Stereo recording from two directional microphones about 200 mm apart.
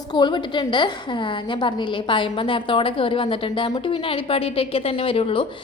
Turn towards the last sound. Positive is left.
turn(degrees=25)  # may be behind; listen again after turning